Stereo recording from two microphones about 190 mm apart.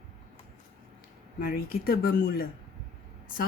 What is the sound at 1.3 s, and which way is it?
Speech, 55° left (ahead or behind).